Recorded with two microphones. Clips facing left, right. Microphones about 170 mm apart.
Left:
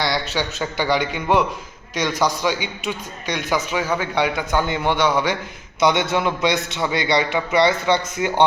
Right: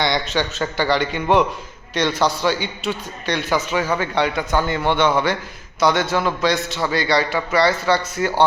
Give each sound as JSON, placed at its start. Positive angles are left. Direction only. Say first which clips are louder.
{"t": 0.0, "sound": "a man's voice", "louder": "right 2 dB", "side_deg": 5}